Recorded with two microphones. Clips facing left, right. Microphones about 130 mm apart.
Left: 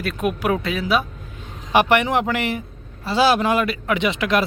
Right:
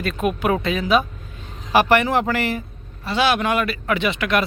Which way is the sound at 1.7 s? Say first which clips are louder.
Even; 20° left (ahead or behind).